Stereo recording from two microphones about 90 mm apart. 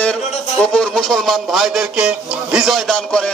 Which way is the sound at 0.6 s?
10° left (ahead or behind).